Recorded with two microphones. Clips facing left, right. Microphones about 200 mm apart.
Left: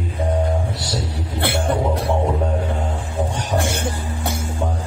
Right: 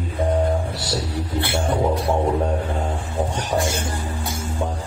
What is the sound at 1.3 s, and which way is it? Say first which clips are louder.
Music: left 1 dB; 60° left (ahead or behind).